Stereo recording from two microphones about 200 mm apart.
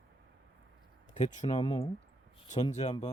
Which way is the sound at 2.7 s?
30° left (ahead or behind).